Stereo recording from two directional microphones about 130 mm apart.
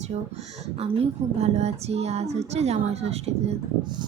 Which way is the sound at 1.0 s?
55° right (ahead or behind).